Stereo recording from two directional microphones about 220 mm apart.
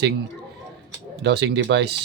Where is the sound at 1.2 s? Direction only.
50° right (ahead or behind).